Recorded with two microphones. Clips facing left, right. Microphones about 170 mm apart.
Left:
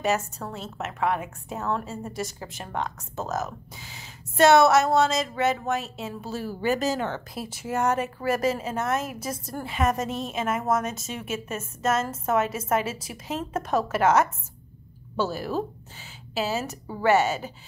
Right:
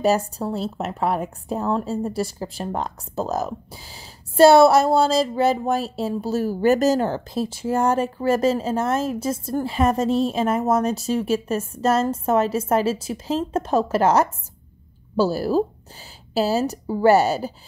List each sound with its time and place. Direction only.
0.0 s a woman's voice: 35° right (ahead or behind)